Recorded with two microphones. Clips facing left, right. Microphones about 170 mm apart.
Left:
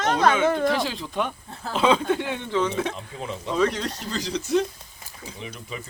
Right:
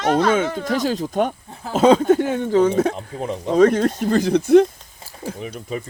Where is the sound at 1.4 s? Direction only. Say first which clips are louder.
Right 1 dB; 15° right (ahead or behind).